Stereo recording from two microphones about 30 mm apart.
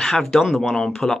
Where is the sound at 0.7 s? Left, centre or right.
Left.